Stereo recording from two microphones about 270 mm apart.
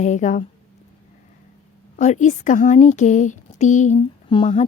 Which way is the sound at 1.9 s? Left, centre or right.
Left.